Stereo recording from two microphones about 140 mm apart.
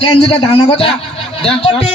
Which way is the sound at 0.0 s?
40° left (ahead or behind).